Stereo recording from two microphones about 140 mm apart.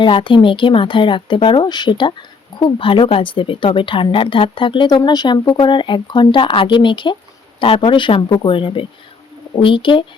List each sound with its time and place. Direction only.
0.0 s speech: 35° left (ahead or behind)